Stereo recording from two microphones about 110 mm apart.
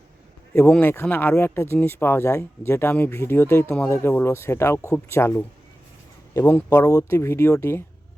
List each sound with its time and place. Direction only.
0.5 s speech: 15° left (ahead or behind)